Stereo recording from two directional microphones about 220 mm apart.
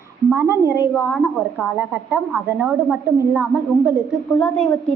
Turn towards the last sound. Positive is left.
turn(degrees=5)  # may be behind; listen again after turning